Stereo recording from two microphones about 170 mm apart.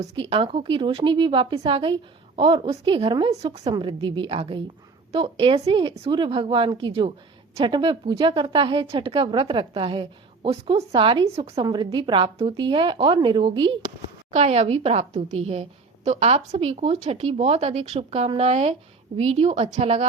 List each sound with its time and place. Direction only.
0.2 s a woman's voice: 35° right (ahead or behind)
14.3 s a woman's voice: 40° right (ahead or behind)